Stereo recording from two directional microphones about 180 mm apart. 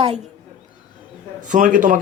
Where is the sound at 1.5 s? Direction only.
45° right (ahead or behind).